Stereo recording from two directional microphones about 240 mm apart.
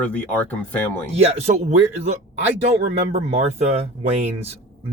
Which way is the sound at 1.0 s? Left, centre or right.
Right.